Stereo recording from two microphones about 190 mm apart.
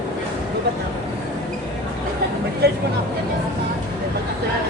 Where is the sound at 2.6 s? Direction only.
55° right (ahead or behind).